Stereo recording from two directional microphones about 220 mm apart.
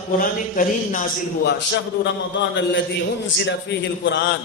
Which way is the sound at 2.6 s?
55° left (ahead or behind).